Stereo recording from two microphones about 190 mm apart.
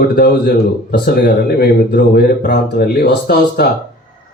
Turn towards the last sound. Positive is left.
turn(degrees=55)  # may be behind; listen again after turning